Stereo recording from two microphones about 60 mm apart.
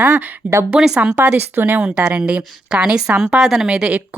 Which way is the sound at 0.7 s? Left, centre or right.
Centre.